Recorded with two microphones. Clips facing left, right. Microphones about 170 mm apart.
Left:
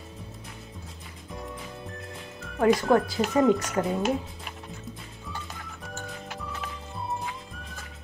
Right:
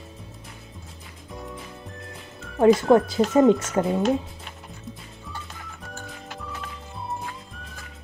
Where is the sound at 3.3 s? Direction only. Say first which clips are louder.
Right 4 dB; 25° right (ahead or behind).